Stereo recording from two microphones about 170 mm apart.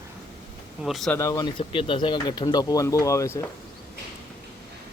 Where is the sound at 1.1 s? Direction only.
20° left (ahead or behind).